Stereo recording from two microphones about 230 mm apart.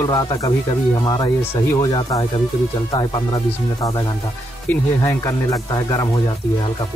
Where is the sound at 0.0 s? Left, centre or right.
Centre.